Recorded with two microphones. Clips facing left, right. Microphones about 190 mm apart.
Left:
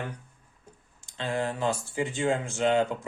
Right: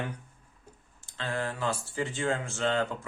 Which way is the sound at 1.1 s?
20° left (ahead or behind).